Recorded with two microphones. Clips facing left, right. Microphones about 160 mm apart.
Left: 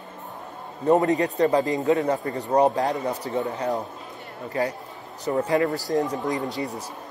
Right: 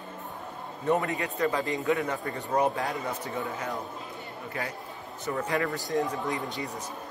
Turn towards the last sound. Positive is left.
turn(degrees=40)  # may be behind; listen again after turning